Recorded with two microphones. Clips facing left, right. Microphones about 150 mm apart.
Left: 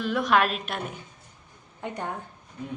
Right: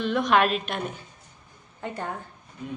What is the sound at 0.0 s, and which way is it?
Speech, 5° left (ahead or behind).